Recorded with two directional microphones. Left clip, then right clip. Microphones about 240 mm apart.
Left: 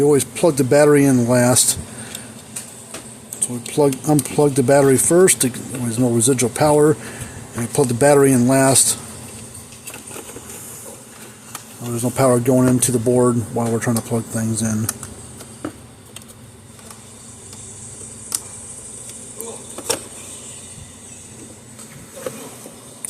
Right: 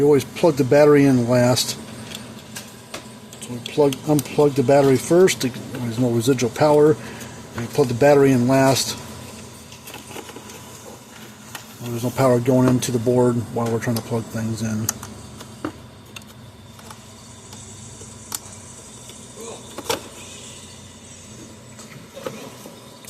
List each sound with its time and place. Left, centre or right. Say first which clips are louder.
0.0 s speech: left 1 dB; centre
3.8 s speech: left 2 dB; left
11.9 s speech: left 2 dB; centre